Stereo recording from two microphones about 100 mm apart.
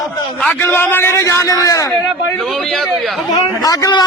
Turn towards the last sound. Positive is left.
turn(degrees=40)  # may be behind; listen again after turning